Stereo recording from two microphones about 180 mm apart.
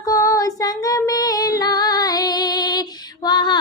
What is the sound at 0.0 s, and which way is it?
Female singing, 20° left (ahead or behind).